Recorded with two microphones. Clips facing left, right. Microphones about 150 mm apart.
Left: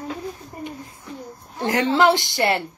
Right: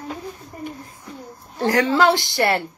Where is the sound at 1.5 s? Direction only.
20° left (ahead or behind).